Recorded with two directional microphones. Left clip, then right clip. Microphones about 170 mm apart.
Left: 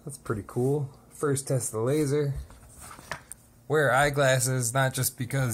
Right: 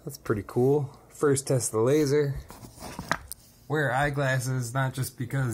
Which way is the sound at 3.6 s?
30° left (ahead or behind).